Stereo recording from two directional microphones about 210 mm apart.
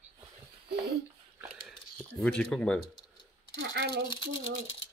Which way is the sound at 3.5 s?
55° right (ahead or behind).